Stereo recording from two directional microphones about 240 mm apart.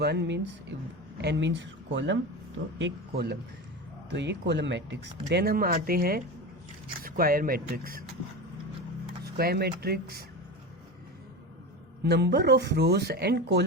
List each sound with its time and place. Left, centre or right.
0.0 s speech: right
9.2 s speech: right
12.0 s speech: right